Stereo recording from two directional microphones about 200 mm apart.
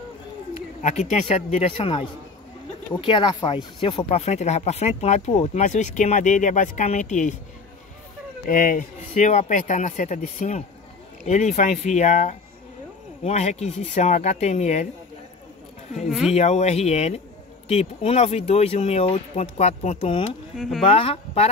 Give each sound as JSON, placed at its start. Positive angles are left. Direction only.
{"t": 0.8, "sound": "speech", "side_deg": 35}
{"t": 8.5, "sound": "speech", "side_deg": 45}
{"t": 16.1, "sound": "speech", "side_deg": 0}
{"t": 16.3, "sound": "speech", "side_deg": 35}
{"t": 20.5, "sound": "speech", "side_deg": 0}
{"t": 20.8, "sound": "speech", "side_deg": 30}